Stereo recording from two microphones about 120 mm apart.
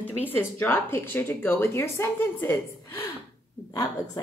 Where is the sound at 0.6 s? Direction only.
20° left (ahead or behind).